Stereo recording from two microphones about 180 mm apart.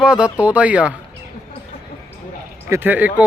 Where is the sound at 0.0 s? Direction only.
5° right (ahead or behind).